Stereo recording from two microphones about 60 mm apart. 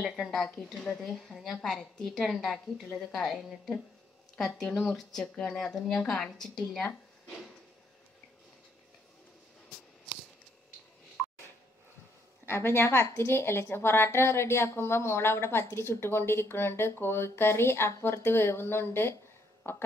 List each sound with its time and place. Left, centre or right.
0.1 s a woman's voice: centre
7.2 s drawer open or close: centre
12.4 s a woman's voice: left